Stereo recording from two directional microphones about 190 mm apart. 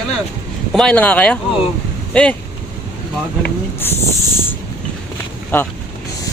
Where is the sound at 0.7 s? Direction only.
5° left (ahead or behind).